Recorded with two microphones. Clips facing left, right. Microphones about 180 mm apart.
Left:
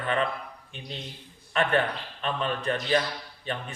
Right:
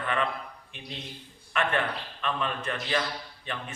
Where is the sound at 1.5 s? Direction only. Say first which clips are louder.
Left 3 dB; 35° left (ahead or behind).